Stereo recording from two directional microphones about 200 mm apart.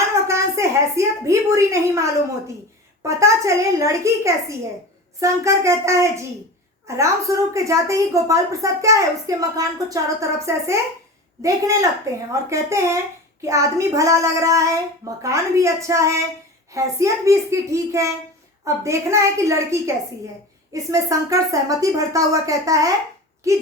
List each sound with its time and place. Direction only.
0.3 s a woman's voice: 15° right (ahead or behind)
20.9 s a woman's voice: 15° right (ahead or behind)